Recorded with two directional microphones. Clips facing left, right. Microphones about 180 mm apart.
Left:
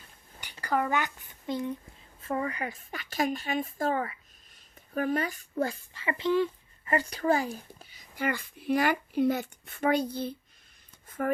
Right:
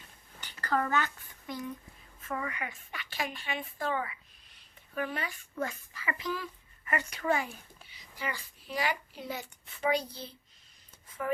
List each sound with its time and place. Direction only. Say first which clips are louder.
0.3 s a child's voice: left 2 dB; 10° left (ahead or behind); by 8.0 s 40° left (ahead or behind)
8.2 s speech: left 8 dB; 55° left (ahead or behind)